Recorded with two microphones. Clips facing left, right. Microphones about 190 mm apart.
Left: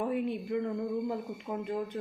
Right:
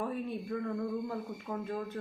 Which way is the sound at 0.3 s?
20° left (ahead or behind).